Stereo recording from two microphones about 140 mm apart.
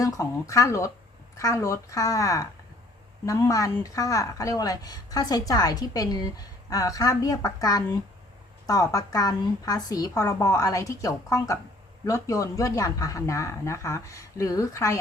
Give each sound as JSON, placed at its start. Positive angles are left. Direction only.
{"t": 0.0, "sound": "a woman's voice", "side_deg": 20}